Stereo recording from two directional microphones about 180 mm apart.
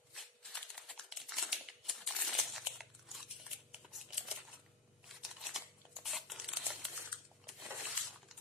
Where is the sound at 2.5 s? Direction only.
Centre (ahead or behind).